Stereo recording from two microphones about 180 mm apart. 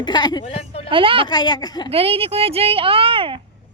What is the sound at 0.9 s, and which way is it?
Speech, 30° right (ahead or behind).